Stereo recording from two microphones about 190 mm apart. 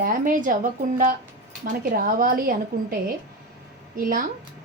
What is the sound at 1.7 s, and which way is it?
A woman's voice, 45° right (ahead or behind).